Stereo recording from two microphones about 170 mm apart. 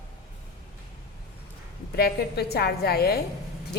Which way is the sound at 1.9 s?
65° left (ahead or behind).